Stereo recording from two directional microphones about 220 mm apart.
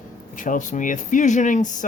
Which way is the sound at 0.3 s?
35° left (ahead or behind).